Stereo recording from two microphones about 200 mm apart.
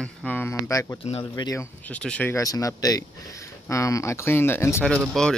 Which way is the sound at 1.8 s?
5° left (ahead or behind).